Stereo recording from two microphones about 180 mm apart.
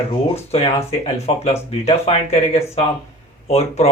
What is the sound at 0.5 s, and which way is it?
Speech, 35° left (ahead or behind).